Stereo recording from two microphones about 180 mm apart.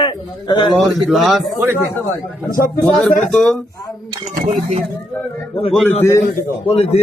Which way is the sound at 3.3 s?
5° left (ahead or behind).